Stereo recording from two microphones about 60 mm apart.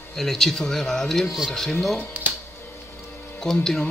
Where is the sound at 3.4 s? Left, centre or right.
Centre.